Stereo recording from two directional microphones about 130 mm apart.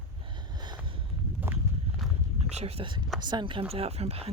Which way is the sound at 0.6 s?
35° right (ahead or behind).